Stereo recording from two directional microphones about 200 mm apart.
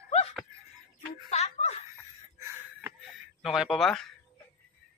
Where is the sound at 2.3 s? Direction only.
15° right (ahead or behind).